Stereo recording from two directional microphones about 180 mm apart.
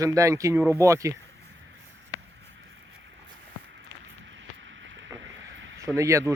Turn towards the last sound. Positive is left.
turn(degrees=-15)  # may be behind; listen again after turning